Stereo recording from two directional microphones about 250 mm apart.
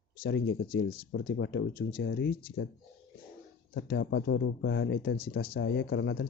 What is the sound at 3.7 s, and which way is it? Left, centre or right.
Speech, left.